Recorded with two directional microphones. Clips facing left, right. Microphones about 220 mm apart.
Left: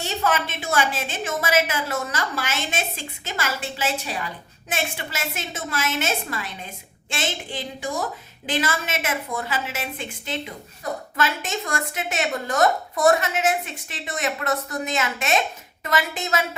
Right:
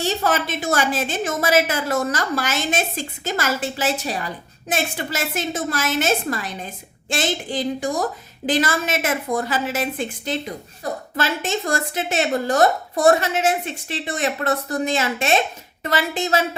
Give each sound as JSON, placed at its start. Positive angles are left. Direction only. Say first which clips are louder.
{"t": 0.0, "sound": "speech", "louder": "right 3 dB", "side_deg": -35}